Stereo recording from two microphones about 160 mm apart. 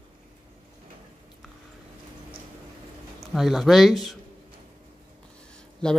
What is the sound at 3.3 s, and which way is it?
Speech, centre (ahead or behind).